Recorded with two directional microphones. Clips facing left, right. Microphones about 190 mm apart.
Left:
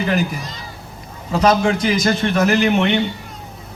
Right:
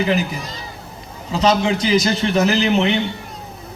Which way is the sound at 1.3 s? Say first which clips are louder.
Left 1 dB; 50° left (ahead or behind).